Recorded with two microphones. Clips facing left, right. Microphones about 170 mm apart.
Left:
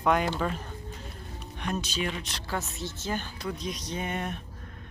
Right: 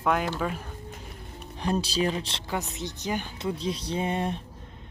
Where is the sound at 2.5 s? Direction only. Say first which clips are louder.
Right 2 dB; 15° right (ahead or behind).